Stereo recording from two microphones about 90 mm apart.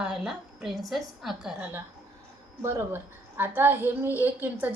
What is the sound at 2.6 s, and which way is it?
A woman's voice, 30° right (ahead or behind).